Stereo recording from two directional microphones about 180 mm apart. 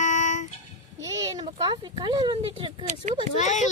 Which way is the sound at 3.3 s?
40° left (ahead or behind).